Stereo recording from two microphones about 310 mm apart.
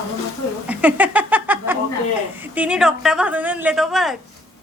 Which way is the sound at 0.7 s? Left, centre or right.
Centre.